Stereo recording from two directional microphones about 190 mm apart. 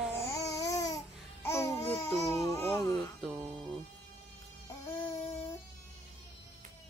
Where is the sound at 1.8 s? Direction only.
30° left (ahead or behind).